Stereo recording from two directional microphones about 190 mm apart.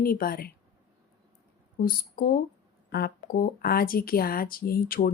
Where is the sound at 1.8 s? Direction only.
50° left (ahead or behind).